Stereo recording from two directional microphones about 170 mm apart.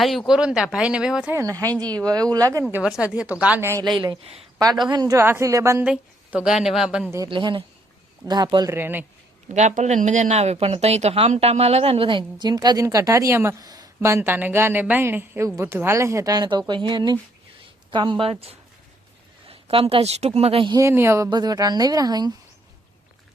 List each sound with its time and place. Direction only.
0.0 s speech: centre (ahead or behind)
1.4 s speech: 20° right (ahead or behind)
2.7 s speech: 5° right (ahead or behind); by 4.4 s 35° right (ahead or behind)
4.9 s speech: 20° right (ahead or behind)
5.8 s speech: 5° right (ahead or behind)
7.3 s speech: 30° right (ahead or behind); by 9.0 s 10° right (ahead or behind)
9.6 s a woman's voice: 45° right (ahead or behind)
20.7 s speech: 15° right (ahead or behind)